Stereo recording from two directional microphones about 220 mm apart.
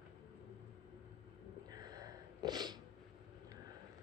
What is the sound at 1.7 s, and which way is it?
Sneeze, 15° right (ahead or behind).